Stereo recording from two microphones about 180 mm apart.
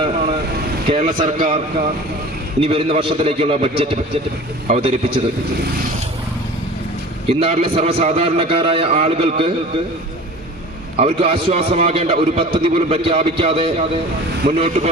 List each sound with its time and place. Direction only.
0.9 s a man's voice: 35° right (ahead or behind)
7.3 s a man's voice: 30° right (ahead or behind)
10.9 s a man's voice: 35° right (ahead or behind)